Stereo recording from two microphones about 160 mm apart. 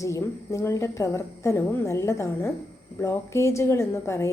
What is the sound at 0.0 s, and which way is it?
A woman's voice, 20° left (ahead or behind).